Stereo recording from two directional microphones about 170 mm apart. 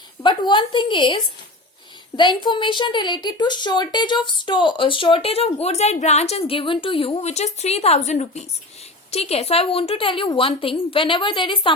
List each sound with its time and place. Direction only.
0.2 s a woman's voice: 25° left (ahead or behind)